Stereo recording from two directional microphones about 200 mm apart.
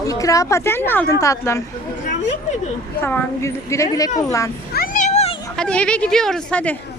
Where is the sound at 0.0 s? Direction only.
15° left (ahead or behind).